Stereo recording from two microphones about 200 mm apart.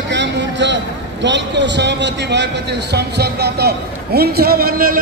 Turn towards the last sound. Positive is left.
turn(degrees=-45)  # may be behind; listen again after turning